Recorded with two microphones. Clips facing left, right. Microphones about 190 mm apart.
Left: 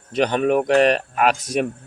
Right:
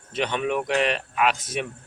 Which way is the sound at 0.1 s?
40° left (ahead or behind).